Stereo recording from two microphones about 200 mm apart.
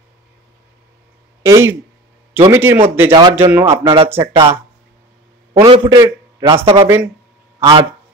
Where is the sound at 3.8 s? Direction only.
25° right (ahead or behind).